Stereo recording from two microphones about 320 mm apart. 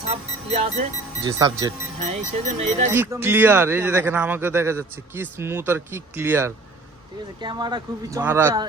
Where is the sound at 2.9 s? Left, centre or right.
Centre.